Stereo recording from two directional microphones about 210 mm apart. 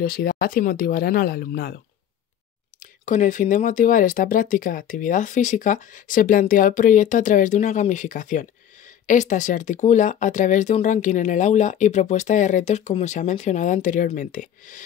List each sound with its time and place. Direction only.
0.0 s speech: 45° left (ahead or behind)
2.8 s speech: 35° left (ahead or behind)